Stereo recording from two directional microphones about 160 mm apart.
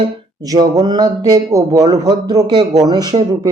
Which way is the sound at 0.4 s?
25° right (ahead or behind).